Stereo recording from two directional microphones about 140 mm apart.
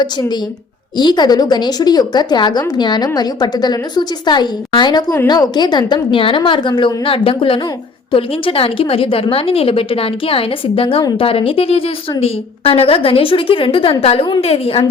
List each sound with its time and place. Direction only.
0.0 s a woman's voice: 30° left (ahead or behind)